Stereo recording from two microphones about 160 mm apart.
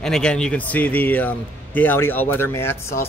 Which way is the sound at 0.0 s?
5° left (ahead or behind).